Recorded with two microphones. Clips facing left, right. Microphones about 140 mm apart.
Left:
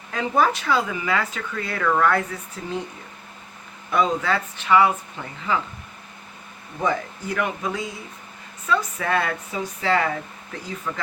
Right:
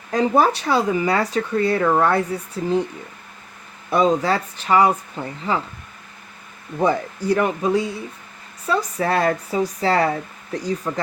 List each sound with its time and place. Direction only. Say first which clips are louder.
0.1 s speech: right 4 dB; 35° right (ahead or behind)
3.8 s speech: right 4 dB; 35° right (ahead or behind)
6.7 s speech: right 5 dB; 35° right (ahead or behind)